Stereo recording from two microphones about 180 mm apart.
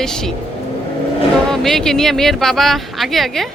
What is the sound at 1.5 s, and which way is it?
Speech, centre (ahead or behind).